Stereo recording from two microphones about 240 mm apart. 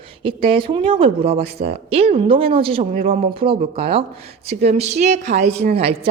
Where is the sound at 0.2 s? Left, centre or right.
Right.